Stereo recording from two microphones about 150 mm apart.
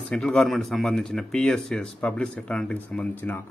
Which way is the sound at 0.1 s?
5° left (ahead or behind).